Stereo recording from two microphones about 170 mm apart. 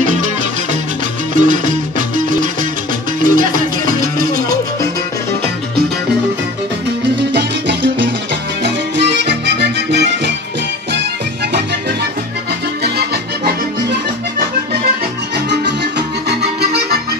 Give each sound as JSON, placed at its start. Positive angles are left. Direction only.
{"t": 1.3, "sound": "music", "side_deg": -50}
{"t": 7.3, "sound": "music", "side_deg": -90}
{"t": 12.8, "sound": "music", "side_deg": -75}
{"t": 15.6, "sound": "music", "side_deg": -90}